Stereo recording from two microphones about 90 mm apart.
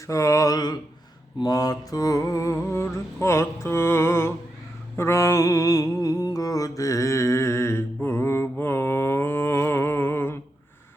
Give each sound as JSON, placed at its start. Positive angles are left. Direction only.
{"t": 0.1, "sound": "mantra", "side_deg": 35}